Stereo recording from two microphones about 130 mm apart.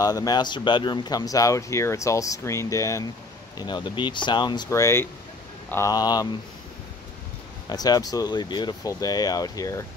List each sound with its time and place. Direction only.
0.0 s speech: 30° left (ahead or behind)
4.6 s speech: 20° left (ahead or behind)
7.7 s speech: 30° left (ahead or behind)